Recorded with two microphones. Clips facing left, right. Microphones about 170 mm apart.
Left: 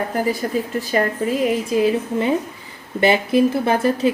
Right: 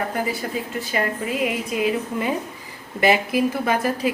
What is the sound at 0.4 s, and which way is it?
A woman's voice, 40° left (ahead or behind).